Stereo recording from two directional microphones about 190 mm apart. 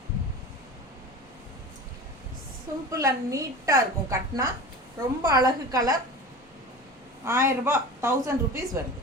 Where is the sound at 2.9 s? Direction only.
15° right (ahead or behind).